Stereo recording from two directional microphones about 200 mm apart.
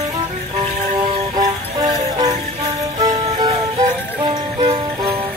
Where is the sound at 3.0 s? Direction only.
20° right (ahead or behind).